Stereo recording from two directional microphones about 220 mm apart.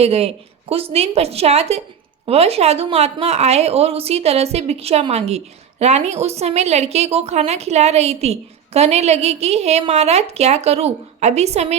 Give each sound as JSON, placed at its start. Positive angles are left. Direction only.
{"t": 0.0, "sound": "a woman's voice", "side_deg": -30}